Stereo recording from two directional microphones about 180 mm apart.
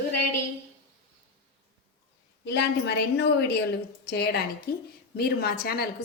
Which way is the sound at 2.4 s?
70° left (ahead or behind).